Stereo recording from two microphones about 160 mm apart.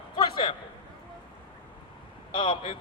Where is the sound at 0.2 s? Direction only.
30° left (ahead or behind).